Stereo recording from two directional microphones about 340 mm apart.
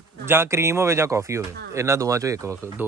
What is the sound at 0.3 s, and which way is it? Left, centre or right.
Speech, centre.